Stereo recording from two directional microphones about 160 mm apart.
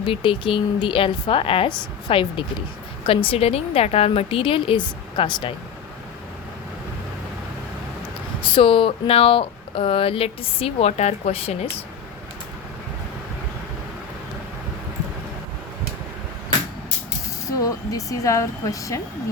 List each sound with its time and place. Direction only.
0.0 s speech: 35° left (ahead or behind)
8.4 s speech: 30° left (ahead or behind)
17.6 s speech: 20° left (ahead or behind)